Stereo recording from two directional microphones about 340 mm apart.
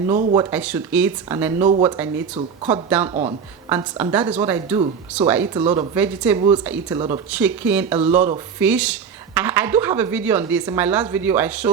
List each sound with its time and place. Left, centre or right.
0.1 s speech: right
0.3 s speech: centre
2.0 s speech: centre